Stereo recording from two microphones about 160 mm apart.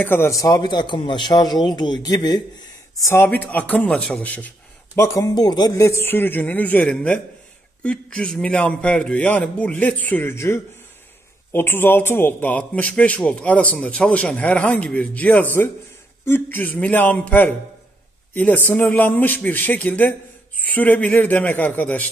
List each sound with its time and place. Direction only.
0.0 s a man's voice: 15° left (ahead or behind)
3.1 s a man's voice: 10° left (ahead or behind)
4.9 s a man's voice: 20° left (ahead or behind)